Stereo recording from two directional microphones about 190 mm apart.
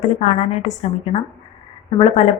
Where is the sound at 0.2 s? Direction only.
35° left (ahead or behind).